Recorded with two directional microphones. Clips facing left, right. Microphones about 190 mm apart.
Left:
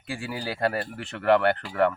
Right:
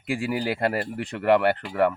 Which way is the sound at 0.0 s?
15° right (ahead or behind).